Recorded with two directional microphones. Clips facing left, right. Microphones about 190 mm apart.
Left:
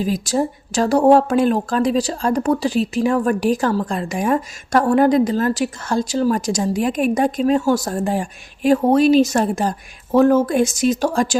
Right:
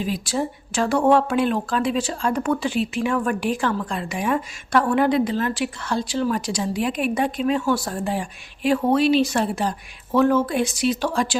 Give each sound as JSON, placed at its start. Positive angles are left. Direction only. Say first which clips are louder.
{"t": 0.0, "sound": "speech", "louder": "left 5 dB", "side_deg": 40}